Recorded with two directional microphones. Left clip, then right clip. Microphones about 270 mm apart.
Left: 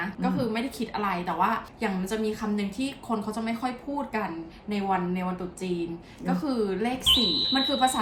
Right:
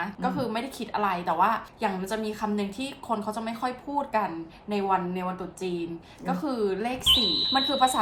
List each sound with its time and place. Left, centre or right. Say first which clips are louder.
0.0 s a woman's voice: even; centre
7.0 s speech: right 1 dB; centre